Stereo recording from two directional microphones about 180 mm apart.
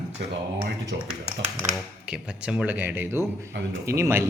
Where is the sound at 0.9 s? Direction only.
70° right (ahead or behind).